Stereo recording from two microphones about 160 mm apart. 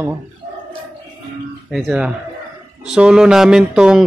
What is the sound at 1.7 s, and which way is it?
Speech, 5° right (ahead or behind).